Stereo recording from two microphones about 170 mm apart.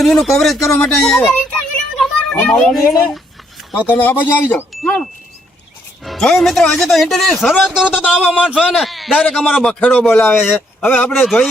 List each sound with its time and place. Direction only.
0.0 s speech: centre (ahead or behind)
2.7 s speech: 20° left (ahead or behind)
3.7 s speech: 10° left (ahead or behind)
6.1 s speech: centre (ahead or behind)